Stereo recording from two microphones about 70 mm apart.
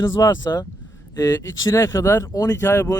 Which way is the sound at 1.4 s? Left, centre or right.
Left.